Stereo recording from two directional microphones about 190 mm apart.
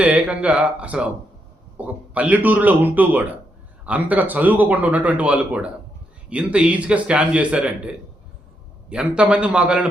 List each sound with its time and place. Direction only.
0.0 s speech: 5° right (ahead or behind)
8.9 s a man's voice: 5° right (ahead or behind)